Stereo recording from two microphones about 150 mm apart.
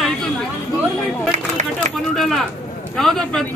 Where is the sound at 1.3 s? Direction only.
55° right (ahead or behind).